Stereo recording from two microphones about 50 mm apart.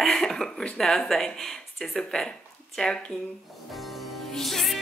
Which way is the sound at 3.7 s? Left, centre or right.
Centre.